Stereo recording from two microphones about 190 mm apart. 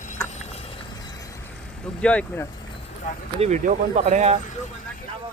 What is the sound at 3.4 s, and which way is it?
Speech, 40° right (ahead or behind).